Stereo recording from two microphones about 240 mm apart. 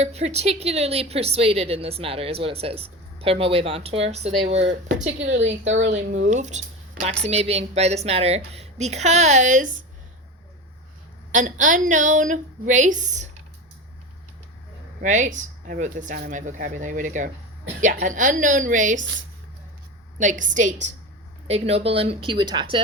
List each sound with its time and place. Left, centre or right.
0.0 s speech: right
5.3 s a woman's voice: right
5.8 s speech: right
11.3 s speech: right
15.0 s speech: right
20.1 s speech: right